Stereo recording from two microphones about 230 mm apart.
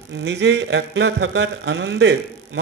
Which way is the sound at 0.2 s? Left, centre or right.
Right.